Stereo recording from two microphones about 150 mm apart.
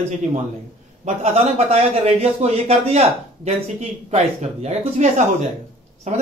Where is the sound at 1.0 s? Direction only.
45° right (ahead or behind).